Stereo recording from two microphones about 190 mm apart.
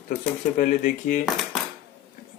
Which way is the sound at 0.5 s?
45° left (ahead or behind).